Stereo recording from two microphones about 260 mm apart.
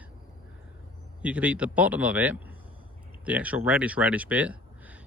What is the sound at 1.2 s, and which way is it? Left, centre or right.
Speech, centre.